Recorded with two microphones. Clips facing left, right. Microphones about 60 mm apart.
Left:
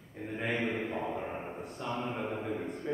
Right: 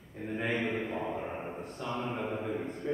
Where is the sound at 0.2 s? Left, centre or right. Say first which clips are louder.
Right 1 dB; centre.